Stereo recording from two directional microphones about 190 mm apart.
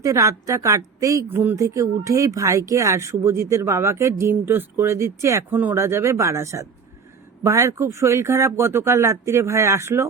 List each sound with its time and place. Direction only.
0.0 s speech: 15° right (ahead or behind)